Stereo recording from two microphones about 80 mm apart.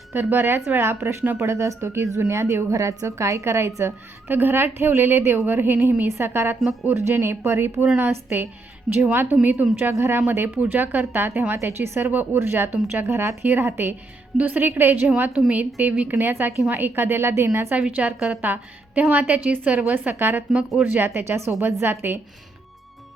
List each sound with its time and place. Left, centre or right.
0.1 s speech: right
1.4 s a woman's voice: right
15.1 s speech: centre; by 17.7 s right
17.7 s a woman's voice: centre